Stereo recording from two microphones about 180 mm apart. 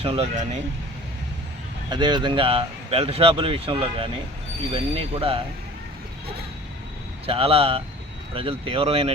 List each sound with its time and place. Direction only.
0.0 s speech: 35° right (ahead or behind)
1.9 s speech: 25° right (ahead or behind)
7.3 s speech: 30° right (ahead or behind)